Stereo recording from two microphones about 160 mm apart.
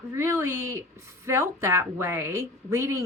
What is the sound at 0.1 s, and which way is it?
Speech, 15° right (ahead or behind).